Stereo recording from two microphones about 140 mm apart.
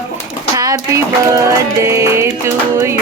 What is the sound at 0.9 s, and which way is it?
Music, 25° right (ahead or behind).